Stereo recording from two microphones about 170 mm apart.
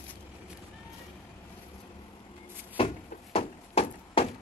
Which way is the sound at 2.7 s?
35° left (ahead or behind).